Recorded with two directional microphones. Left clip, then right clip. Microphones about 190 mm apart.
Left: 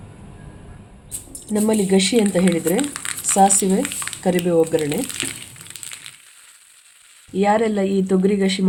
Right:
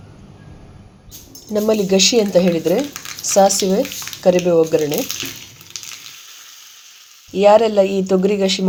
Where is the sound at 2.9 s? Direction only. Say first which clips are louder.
Right 2 dB; 5° left (ahead or behind).